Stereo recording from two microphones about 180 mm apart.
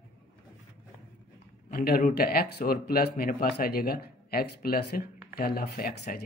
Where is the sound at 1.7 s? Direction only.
55° left (ahead or behind).